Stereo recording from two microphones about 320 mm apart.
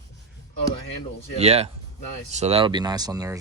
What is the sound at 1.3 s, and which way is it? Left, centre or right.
Speech, centre.